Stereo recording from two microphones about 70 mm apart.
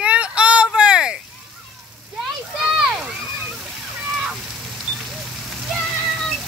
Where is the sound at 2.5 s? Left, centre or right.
Centre.